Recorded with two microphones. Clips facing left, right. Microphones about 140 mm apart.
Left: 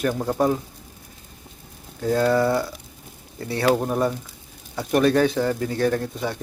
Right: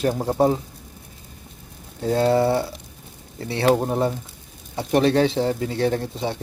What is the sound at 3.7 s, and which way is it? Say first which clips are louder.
Speech: even; 25° right (ahead or behind).